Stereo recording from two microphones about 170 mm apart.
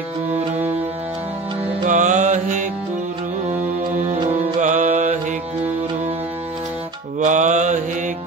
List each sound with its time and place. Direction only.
1.9 s music: 45° right (ahead or behind)
4.6 s music: 45° right (ahead or behind)
7.2 s music: 45° right (ahead or behind)